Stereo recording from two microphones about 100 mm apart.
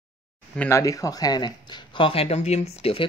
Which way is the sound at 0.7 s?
35° left (ahead or behind).